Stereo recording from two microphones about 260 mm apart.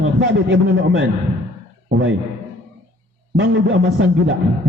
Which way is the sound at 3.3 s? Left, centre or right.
Right.